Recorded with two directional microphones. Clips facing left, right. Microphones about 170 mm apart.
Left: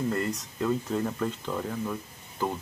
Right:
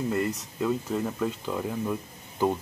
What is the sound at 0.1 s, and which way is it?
Speech, 5° right (ahead or behind).